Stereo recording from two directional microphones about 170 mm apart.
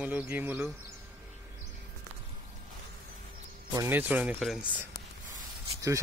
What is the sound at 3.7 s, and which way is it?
A man's voice, 15° right (ahead or behind).